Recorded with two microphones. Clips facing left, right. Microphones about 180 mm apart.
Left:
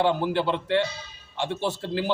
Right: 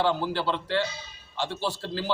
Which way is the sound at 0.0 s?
20° left (ahead or behind).